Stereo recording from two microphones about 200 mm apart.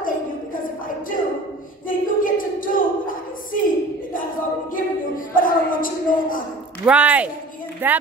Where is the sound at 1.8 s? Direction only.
45° left (ahead or behind).